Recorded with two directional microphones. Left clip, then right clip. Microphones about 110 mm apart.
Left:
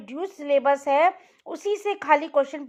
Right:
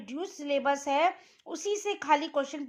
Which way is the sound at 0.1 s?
45° left (ahead or behind).